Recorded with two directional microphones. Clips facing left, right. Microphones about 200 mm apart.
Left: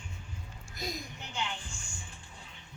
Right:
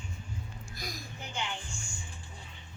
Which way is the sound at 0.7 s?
20° left (ahead or behind).